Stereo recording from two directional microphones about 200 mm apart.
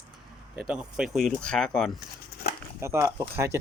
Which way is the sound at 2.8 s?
15° right (ahead or behind).